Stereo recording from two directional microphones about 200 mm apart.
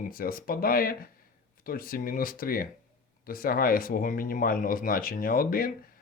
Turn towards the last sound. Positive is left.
turn(degrees=45)  # may be behind; listen again after turning